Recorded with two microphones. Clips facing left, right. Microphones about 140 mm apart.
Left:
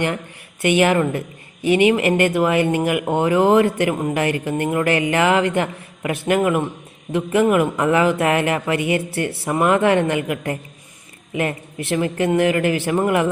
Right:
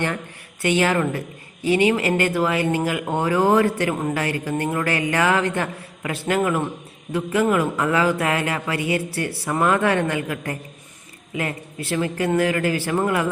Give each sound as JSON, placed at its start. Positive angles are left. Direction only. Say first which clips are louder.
{"t": 0.6, "sound": "a woman's voice", "louder": "left 3 dB", "side_deg": 15}